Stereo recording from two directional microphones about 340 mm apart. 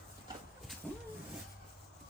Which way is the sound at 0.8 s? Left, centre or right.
Centre.